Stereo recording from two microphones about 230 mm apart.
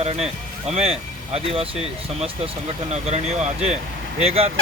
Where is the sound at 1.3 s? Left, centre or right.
Right.